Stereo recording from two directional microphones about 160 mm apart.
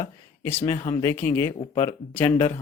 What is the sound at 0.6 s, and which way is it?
Speech, 20° left (ahead or behind).